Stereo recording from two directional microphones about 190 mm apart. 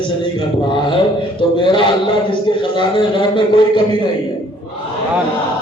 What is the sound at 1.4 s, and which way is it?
A man's voice, 25° left (ahead or behind).